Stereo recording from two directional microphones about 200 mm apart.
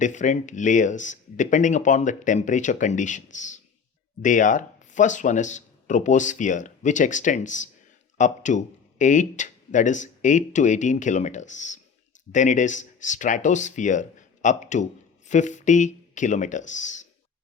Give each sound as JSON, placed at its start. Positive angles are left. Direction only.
{"t": 0.0, "sound": "speech", "side_deg": 40}